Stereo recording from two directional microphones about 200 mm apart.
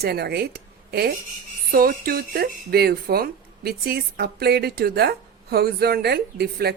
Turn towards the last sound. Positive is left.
turn(degrees=-50)  # may be behind; listen again after turning